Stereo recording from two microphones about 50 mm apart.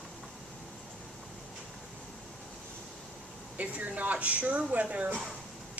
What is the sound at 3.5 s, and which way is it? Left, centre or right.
A woman's voice, right.